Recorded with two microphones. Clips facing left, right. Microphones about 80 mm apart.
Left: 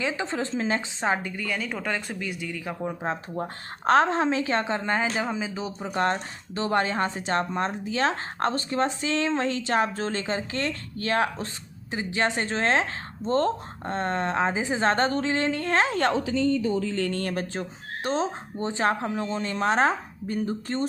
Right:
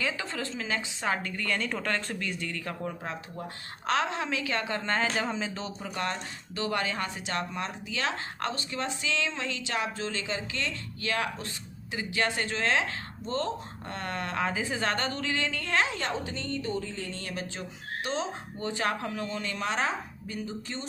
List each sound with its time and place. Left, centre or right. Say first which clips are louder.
0.0 s a woman's voice: left 5 dB; left
3.0 s a woman's voice: left 8 dB; left
4.8 s a woman's voice: left 3 dB; centre
5.8 s a woman's voice: left 9 dB; left
16.9 s a woman's voice: left 9 dB; left